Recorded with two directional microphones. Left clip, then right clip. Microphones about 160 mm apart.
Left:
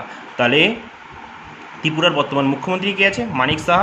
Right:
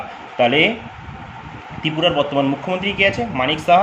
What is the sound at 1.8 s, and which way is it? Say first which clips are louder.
A man's voice: left 1 dB; 35° left (ahead or behind).